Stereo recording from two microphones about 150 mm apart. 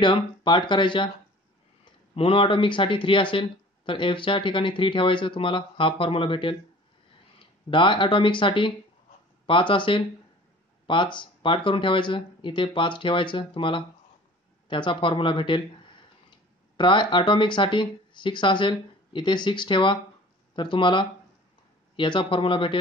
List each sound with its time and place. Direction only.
0.0 s speech: 30° left (ahead or behind)
2.1 s speech: 35° left (ahead or behind)
7.7 s speech: 35° left (ahead or behind)